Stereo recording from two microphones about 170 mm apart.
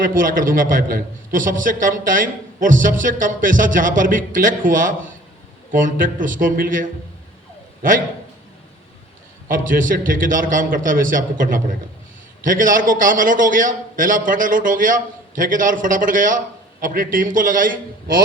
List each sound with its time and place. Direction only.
0.0 s a man's voice: 55° right (ahead or behind)
9.5 s a man's voice: 50° right (ahead or behind)